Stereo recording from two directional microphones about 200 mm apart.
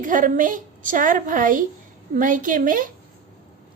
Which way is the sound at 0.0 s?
40° right (ahead or behind).